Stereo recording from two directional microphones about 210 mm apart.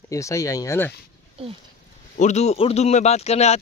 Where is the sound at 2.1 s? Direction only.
35° left (ahead or behind).